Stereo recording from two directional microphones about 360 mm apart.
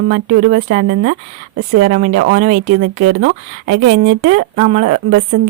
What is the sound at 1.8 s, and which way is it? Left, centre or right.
Speech, right.